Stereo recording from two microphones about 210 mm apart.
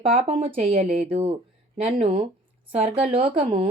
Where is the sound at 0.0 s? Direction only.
25° right (ahead or behind).